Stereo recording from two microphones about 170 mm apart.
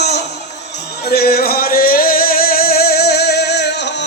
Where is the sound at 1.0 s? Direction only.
65° left (ahead or behind).